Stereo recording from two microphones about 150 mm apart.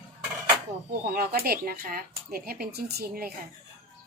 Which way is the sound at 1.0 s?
80° right.